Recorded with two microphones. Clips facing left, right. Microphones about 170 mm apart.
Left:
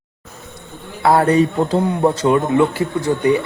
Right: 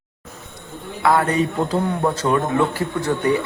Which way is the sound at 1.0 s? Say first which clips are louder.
Left 5 dB; 35° left (ahead or behind).